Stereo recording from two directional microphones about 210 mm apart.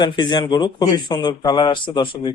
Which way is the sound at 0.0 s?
20° left (ahead or behind).